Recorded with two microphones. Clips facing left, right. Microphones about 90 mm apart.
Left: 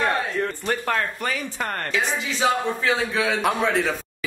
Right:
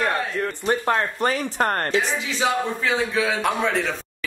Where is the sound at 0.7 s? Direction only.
20° right (ahead or behind).